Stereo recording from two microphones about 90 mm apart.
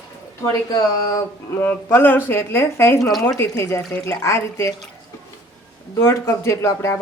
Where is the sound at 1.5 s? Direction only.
25° left (ahead or behind).